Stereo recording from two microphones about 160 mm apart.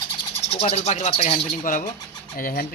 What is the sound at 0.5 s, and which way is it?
Speech, 40° left (ahead or behind).